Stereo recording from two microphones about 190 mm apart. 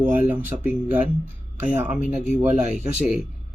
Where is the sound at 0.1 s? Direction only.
10° right (ahead or behind).